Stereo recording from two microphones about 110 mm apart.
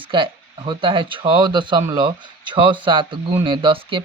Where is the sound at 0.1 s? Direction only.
50° right (ahead or behind).